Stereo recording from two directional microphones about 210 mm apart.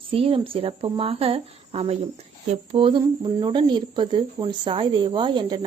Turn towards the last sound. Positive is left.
turn(degrees=-20)  # may be behind; listen again after turning